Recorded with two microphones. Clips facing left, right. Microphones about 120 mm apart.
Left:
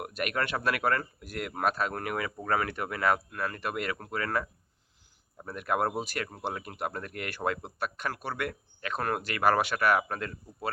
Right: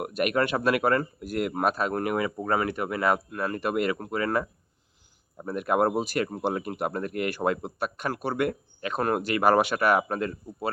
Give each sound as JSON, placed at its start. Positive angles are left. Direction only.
{"t": 0.0, "sound": "speech", "side_deg": -20}